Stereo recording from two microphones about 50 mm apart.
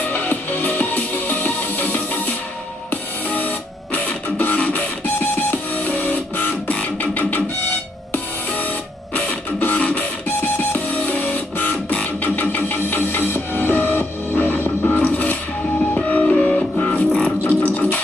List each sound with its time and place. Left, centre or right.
0.1 s music: left
15.0 s mechanisms: left
16.0 s music: left